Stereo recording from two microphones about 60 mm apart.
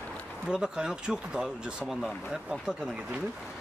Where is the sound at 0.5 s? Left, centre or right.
Centre.